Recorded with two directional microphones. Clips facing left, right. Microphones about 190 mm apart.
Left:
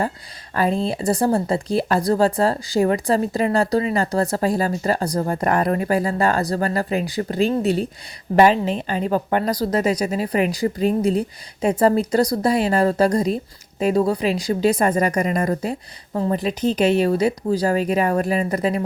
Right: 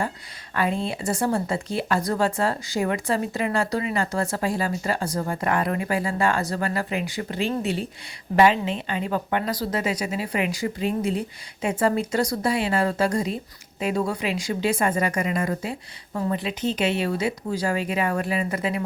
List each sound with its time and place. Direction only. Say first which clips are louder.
0.5 s speech: left 5 dB; 35° left (ahead or behind)